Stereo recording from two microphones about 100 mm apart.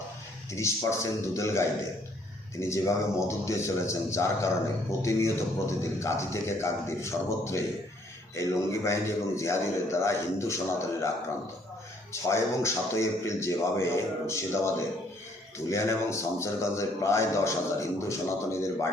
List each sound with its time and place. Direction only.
0.5 s a man's voice: 30° left (ahead or behind)
12.3 s a man's voice: 30° left (ahead or behind)